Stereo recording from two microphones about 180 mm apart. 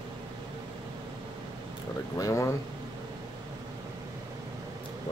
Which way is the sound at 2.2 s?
15° left (ahead or behind).